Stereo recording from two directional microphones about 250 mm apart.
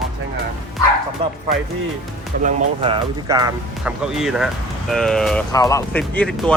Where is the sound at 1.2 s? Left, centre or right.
Right.